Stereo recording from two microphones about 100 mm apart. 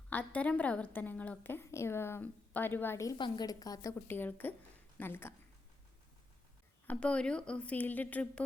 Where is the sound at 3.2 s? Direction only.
40° left (ahead or behind).